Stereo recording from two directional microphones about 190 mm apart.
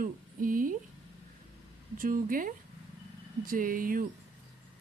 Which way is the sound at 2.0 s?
45° right (ahead or behind).